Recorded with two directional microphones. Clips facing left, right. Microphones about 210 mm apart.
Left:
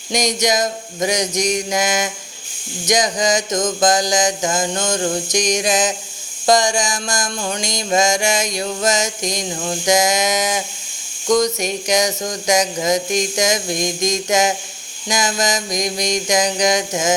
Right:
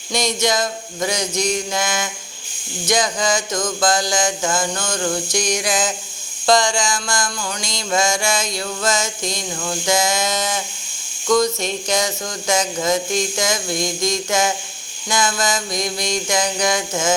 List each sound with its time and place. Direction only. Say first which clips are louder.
0.1 s mantra: left 2 dB; 15° left (ahead or behind)
2.8 s a sound: left 2 dB; 15° left (ahead or behind)
6.4 s mantra: left 1 dB; 15° left (ahead or behind)